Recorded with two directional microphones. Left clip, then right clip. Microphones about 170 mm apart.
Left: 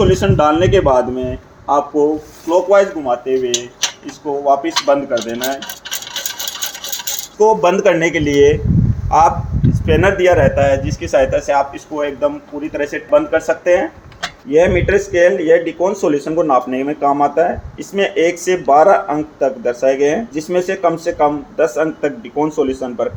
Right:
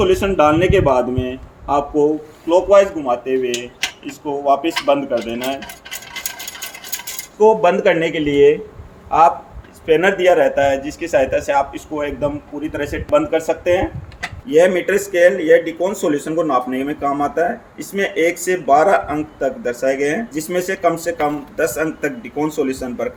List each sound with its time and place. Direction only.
0.2 s speech: 10° left (ahead or behind)
7.3 s a man's voice: 35° left (ahead or behind); by 13.9 s 5° left (ahead or behind)
14.5 s speech: 15° left (ahead or behind)